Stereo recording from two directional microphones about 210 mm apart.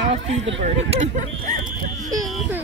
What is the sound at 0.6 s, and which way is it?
Speech, 30° right (ahead or behind).